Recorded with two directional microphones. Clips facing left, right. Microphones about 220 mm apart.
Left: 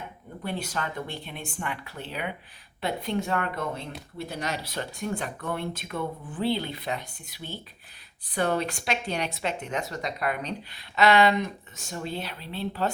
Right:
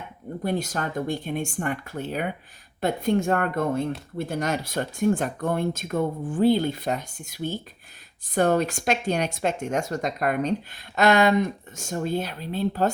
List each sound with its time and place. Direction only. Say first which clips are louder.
0.4 s speech: right 5 dB; 40° right (ahead or behind)